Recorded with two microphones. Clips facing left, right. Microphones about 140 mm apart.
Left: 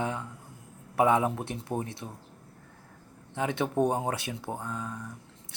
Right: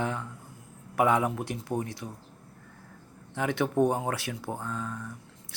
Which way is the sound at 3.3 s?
20° left (ahead or behind).